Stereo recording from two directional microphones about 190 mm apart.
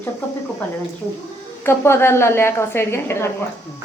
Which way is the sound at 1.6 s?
15° left (ahead or behind).